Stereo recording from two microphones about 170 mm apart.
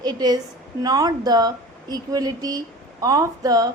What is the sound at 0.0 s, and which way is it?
Speech, 25° right (ahead or behind).